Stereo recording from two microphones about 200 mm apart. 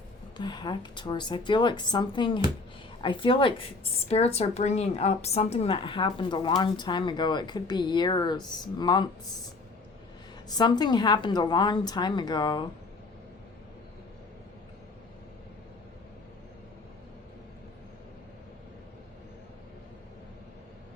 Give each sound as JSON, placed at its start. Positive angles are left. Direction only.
{"t": 0.3, "sound": "speech", "side_deg": 20}
{"t": 10.5, "sound": "speech", "side_deg": 20}